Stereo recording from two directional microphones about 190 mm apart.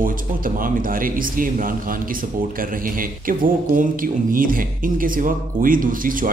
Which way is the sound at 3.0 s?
45° right (ahead or behind).